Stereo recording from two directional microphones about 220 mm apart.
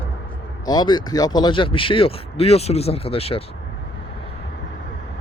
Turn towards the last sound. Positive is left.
turn(degrees=25)  # may be behind; listen again after turning